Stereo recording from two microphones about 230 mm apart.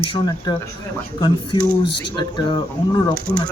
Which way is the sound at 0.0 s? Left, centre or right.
Left.